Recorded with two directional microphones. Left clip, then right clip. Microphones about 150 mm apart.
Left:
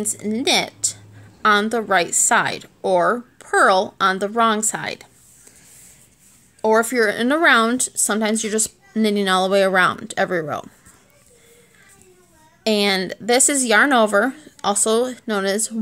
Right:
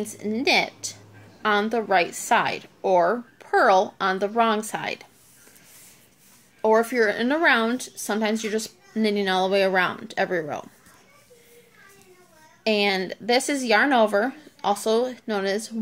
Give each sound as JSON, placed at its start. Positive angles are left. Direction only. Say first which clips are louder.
{"t": 0.0, "sound": "speech", "louder": "left 3 dB", "side_deg": 35}
{"t": 6.6, "sound": "speech", "louder": "left 3 dB", "side_deg": 45}
{"t": 12.6, "sound": "speech", "louder": "left 3 dB", "side_deg": 50}